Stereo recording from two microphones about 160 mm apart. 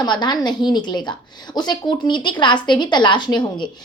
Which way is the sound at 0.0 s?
25° left (ahead or behind).